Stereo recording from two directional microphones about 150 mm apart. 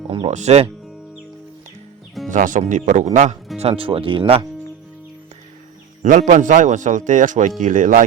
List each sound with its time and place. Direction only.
0.3 s speech: 50° right (ahead or behind)
2.3 s a man's voice: 60° right (ahead or behind)
3.6 s speech: 40° right (ahead or behind)
6.0 s a man's voice: 55° right (ahead or behind)